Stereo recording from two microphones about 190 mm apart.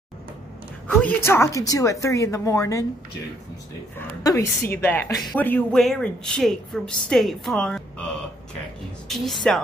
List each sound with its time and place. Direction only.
0.8 s a woman's voice: 10° left (ahead or behind)
4.2 s speech: 15° left (ahead or behind)
9.1 s speech: centre (ahead or behind)